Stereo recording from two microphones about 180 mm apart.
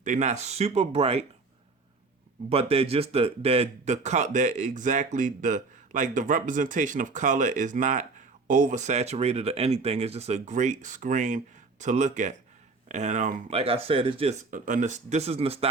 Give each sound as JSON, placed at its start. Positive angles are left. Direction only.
{"t": 0.0, "sound": "speech", "side_deg": -40}
{"t": 2.5, "sound": "speech", "side_deg": -35}
{"t": 14.5, "sound": "speech", "side_deg": -45}